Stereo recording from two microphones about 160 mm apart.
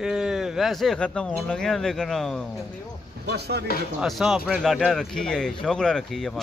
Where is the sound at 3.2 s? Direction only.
90° right.